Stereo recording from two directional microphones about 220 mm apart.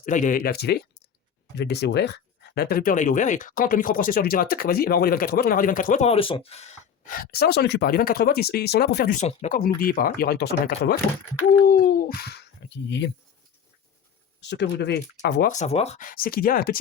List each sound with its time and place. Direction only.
0.0 s speech: 35° left (ahead or behind)
9.1 s speech: 30° left (ahead or behind)
9.6 s speech: 40° left (ahead or behind)
14.4 s speech: 50° left (ahead or behind)